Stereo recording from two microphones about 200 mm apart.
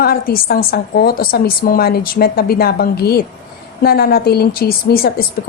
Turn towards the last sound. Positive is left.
turn(degrees=50)  # may be behind; listen again after turning